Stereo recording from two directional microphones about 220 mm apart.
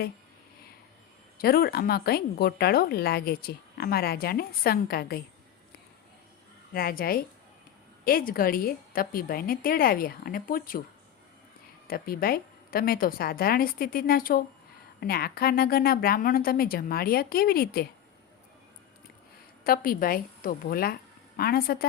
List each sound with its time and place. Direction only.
1.4 s speech: 45° left (ahead or behind)
6.7 s a woman's voice: 45° left (ahead or behind)
11.9 s a woman's voice: 40° left (ahead or behind)
19.6 s a woman's voice: 40° left (ahead or behind)